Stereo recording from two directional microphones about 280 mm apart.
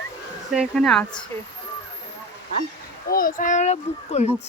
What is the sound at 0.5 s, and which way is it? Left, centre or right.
Speech, centre.